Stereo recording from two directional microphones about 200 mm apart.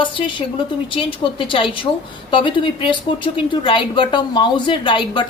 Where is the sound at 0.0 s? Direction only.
25° left (ahead or behind).